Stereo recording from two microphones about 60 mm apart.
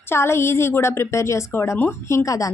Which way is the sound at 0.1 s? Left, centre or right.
Left.